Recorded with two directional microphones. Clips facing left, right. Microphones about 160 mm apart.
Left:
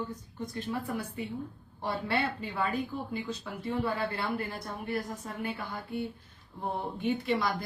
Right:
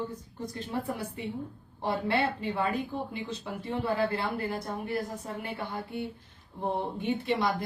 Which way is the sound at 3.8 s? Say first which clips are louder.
Right 5 dB; 25° right (ahead or behind).